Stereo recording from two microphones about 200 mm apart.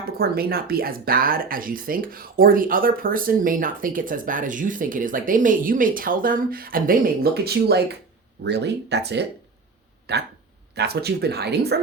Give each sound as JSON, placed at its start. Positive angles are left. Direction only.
{"t": 0.2, "sound": "speech", "side_deg": -50}